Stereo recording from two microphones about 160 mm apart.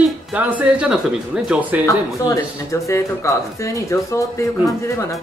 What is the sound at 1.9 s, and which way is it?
Speech, 20° left (ahead or behind).